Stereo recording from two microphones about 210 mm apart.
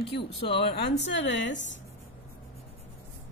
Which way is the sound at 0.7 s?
60° left (ahead or behind).